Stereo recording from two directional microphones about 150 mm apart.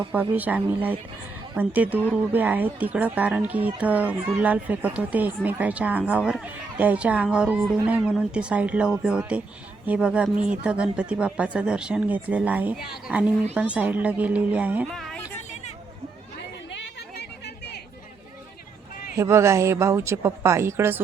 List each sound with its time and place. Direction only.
0.1 s speech: 10° right (ahead or behind)
14.8 s speech: 5° left (ahead or behind)
17.2 s chatter: 90° left
19.1 s speech: 20° right (ahead or behind)